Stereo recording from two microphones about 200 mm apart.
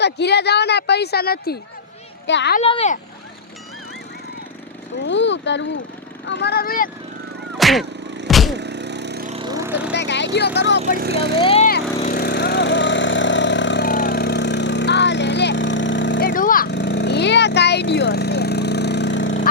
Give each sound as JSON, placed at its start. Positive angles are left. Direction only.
{"t": 0.0, "sound": "a woman's voice", "side_deg": 55}
{"t": 2.6, "sound": "speech", "side_deg": 30}
{"t": 5.0, "sound": "a woman's voice", "side_deg": 65}
{"t": 7.6, "sound": "a sound", "side_deg": 0}
{"t": 8.3, "sound": "music", "side_deg": 0}
{"t": 8.5, "sound": "music", "side_deg": -60}
{"t": 9.4, "sound": "vehicle", "side_deg": -20}
{"t": 9.9, "sound": "a woman's voice", "side_deg": 60}
{"t": 10.9, "sound": "speech", "side_deg": -50}
{"t": 11.3, "sound": "speech", "side_deg": 25}
{"t": 11.6, "sound": "lawn mower", "side_deg": 40}
{"t": 13.8, "sound": "vehicle", "side_deg": 45}
{"t": 16.2, "sound": "a sound", "side_deg": 45}
{"t": 16.6, "sound": "a sound", "side_deg": 60}